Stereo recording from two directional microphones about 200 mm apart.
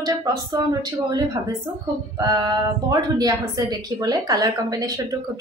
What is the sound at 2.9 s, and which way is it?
A woman's voice, 20° right (ahead or behind).